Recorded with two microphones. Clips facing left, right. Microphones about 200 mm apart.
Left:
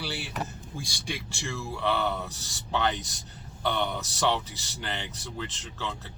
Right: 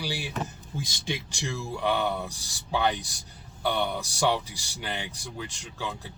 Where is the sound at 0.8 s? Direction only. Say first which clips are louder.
Right 3 dB; 20° right (ahead or behind).